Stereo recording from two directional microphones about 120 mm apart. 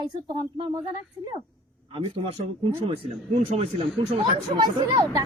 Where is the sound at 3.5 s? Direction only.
55° right (ahead or behind).